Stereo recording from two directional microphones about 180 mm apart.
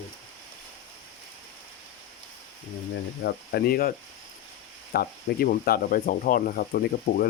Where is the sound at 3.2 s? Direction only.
60° left (ahead or behind).